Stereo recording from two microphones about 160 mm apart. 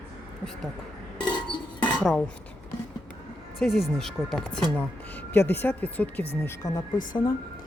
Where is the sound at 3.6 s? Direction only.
Centre (ahead or behind).